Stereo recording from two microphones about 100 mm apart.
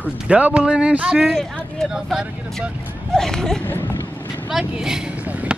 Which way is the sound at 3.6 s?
20° left (ahead or behind).